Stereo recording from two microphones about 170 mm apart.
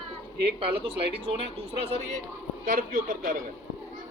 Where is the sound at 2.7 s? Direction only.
55° right (ahead or behind).